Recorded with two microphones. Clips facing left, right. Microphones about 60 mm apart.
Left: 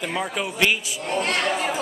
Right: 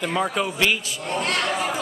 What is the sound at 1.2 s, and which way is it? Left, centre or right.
Speech, left.